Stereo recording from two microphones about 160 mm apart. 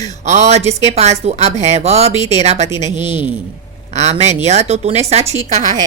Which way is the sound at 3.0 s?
30° left (ahead or behind).